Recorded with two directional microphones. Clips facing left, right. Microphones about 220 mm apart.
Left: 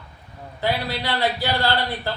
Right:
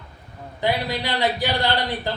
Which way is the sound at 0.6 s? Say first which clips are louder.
Right 1 dB; 15° right (ahead or behind).